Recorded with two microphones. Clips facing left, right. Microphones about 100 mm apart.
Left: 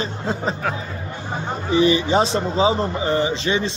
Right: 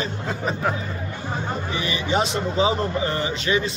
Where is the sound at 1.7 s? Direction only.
30° left (ahead or behind).